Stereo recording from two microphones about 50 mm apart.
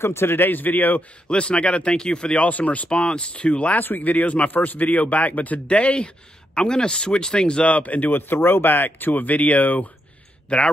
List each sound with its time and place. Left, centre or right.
0.0 s a man's voice: left
1.3 s speech: left
3.7 s speech: left
8.1 s speech: left